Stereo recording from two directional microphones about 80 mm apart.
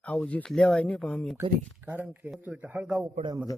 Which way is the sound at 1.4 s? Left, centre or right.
Right.